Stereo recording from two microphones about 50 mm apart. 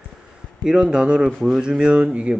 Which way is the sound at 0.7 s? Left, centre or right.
Centre.